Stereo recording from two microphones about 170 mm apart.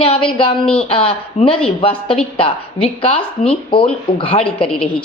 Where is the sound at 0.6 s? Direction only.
5° left (ahead or behind).